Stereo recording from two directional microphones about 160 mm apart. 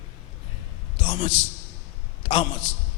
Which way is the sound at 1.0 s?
35° left (ahead or behind).